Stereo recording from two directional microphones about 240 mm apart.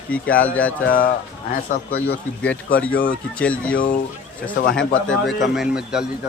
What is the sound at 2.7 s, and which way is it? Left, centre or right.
A man's voice, centre.